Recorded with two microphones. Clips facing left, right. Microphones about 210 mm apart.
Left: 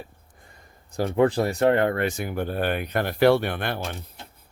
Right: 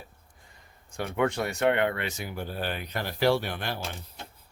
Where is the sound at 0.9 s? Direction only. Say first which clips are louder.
Left 7 dB; 35° left (ahead or behind).